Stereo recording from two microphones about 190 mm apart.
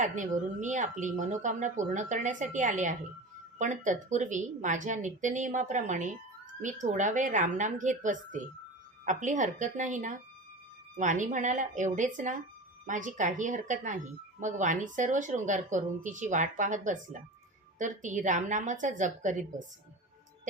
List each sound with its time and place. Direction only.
0.0 s speech: 40° right (ahead or behind)